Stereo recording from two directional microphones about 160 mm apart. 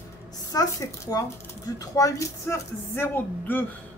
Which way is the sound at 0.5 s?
20° left (ahead or behind).